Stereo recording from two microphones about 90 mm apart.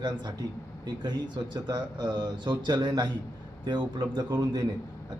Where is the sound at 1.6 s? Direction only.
50° right (ahead or behind).